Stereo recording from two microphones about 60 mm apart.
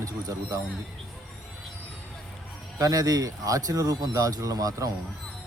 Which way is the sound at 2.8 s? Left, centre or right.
Right.